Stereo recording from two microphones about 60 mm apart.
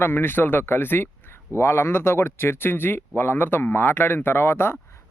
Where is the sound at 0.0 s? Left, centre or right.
Left.